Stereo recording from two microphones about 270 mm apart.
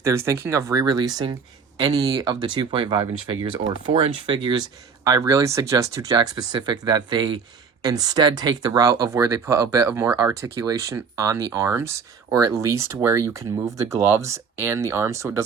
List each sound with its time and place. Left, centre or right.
0.0 s speech: centre